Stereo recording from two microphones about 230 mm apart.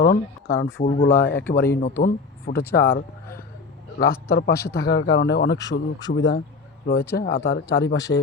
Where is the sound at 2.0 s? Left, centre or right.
Left.